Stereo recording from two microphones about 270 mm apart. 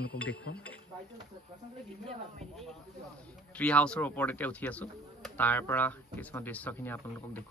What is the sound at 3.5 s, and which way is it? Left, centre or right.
Speech, centre.